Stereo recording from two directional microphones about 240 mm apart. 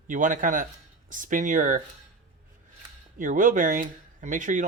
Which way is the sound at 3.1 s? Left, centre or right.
Right.